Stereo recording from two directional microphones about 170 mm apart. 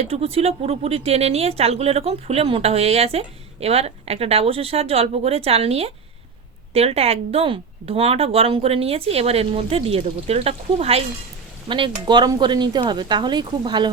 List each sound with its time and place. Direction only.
0.0 s speech: 35° right (ahead or behind)